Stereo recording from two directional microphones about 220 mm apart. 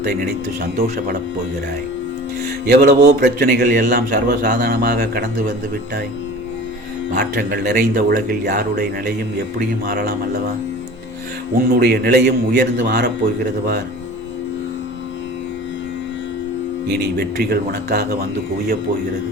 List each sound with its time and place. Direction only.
0.0 s a man's voice: 50° right (ahead or behind)
2.6 s a man's voice: 45° right (ahead or behind)
7.1 s a man's voice: 40° right (ahead or behind)
11.5 s a man's voice: 45° right (ahead or behind)
16.9 s a man's voice: 45° right (ahead or behind)